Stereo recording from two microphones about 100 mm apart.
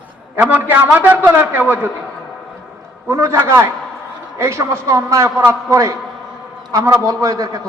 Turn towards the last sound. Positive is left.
turn(degrees=-35)  # may be behind; listen again after turning